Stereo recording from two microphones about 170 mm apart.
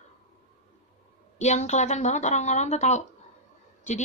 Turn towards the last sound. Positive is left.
turn(degrees=45)  # may be behind; listen again after turning